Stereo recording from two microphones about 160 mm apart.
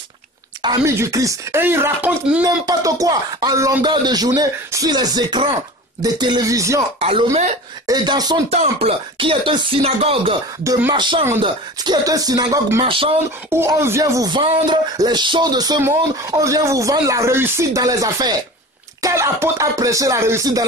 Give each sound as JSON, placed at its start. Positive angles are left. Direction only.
{"t": 0.6, "sound": "speech", "side_deg": -25}
{"t": 2.4, "sound": "speech", "side_deg": -20}
{"t": 7.0, "sound": "speech", "side_deg": -35}
{"t": 7.8, "sound": "speech", "side_deg": -25}
{"t": 8.5, "sound": "speech", "side_deg": -40}
{"t": 10.6, "sound": "speech", "side_deg": -20}
{"t": 10.9, "sound": "speech", "side_deg": -30}
{"t": 12.8, "sound": "speech", "side_deg": -35}
{"t": 13.5, "sound": "speech", "side_deg": -15}